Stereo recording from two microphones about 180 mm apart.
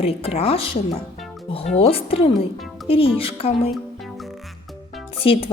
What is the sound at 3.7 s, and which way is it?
Music, centre (ahead or behind).